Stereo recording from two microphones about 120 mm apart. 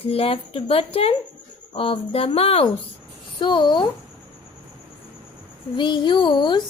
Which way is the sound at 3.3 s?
40° left (ahead or behind).